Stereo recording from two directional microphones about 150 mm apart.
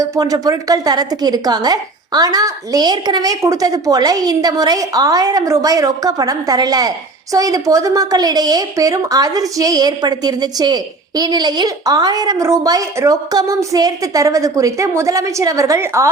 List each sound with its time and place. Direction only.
0.0 s a woman's voice: 25° right (ahead or behind)